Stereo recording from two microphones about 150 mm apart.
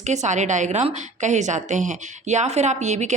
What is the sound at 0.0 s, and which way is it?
A woman's voice, 50° right (ahead or behind).